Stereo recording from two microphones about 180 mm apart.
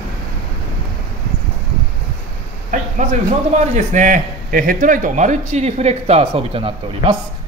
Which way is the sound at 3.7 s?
45° right (ahead or behind).